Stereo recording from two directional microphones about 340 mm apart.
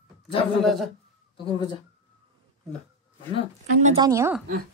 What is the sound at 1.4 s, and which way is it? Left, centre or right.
Speech, centre.